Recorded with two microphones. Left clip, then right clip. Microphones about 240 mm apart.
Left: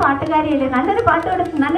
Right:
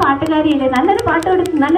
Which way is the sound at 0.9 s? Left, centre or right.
Right.